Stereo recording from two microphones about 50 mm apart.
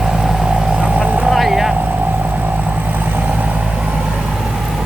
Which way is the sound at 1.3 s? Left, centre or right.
Centre.